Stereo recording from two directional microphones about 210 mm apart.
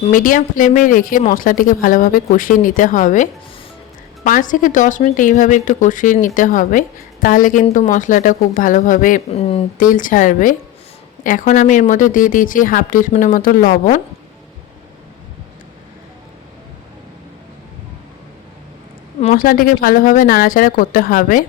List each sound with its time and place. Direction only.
0.0 s speech: 40° left (ahead or behind)
19.2 s speech: 40° left (ahead or behind)